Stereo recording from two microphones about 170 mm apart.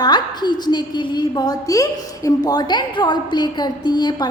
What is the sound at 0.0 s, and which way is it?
A woman's voice, 25° left (ahead or behind).